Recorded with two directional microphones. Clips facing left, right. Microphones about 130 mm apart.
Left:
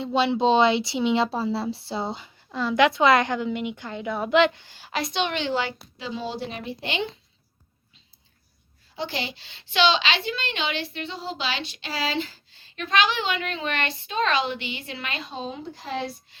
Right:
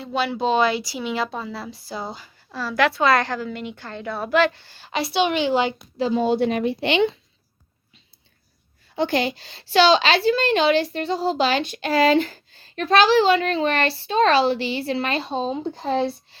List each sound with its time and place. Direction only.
0.0 s speech: 25° left (ahead or behind)
4.9 s a woman's voice: centre (ahead or behind)
6.0 s a woman's voice: 45° right (ahead or behind); by 7.1 s 70° right (ahead or behind)
9.0 s a woman's voice: 50° right (ahead or behind); by 16.4 s 30° right (ahead or behind)